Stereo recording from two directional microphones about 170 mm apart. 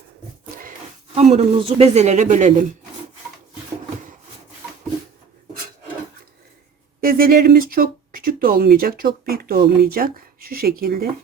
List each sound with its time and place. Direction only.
1.1 s a man's voice: 40° right (ahead or behind)
7.0 s speech: 60° right (ahead or behind)